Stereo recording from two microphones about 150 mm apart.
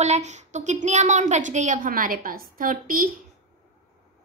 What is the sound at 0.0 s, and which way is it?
A woman's voice, 50° right (ahead or behind).